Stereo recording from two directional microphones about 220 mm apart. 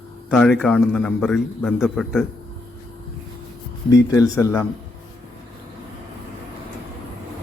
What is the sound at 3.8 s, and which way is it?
Speech, 15° left (ahead or behind).